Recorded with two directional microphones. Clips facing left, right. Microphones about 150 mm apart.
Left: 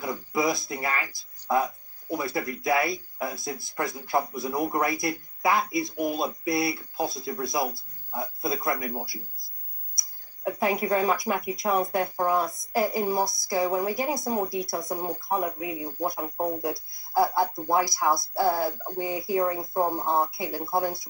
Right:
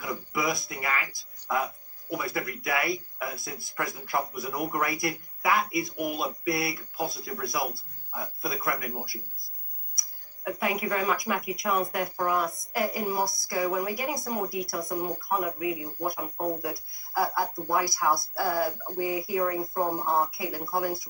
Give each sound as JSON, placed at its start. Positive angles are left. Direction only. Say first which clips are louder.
{"t": 0.0, "sound": "speech", "louder": "left 4 dB", "side_deg": 25}
{"t": 10.4, "sound": "speech", "louder": "left 3 dB", "side_deg": 30}